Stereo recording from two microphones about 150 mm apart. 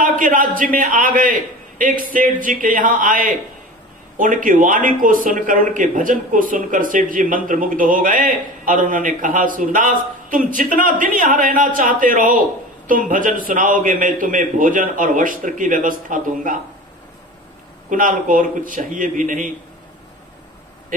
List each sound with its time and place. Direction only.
0.0 s speech: 65° right (ahead or behind)
17.8 s speech: 65° right (ahead or behind)